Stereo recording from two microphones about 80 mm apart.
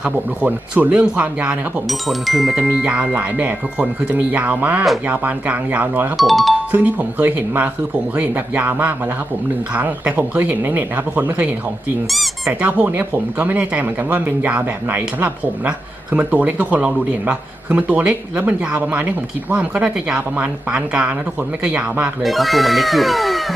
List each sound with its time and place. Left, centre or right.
0.0 s speech: centre
1.9 s speech: centre
2.6 s speech: centre
6.1 s speech: centre
6.7 s speech: right
12.0 s speech: centre
12.6 s speech: centre
22.2 s speech: centre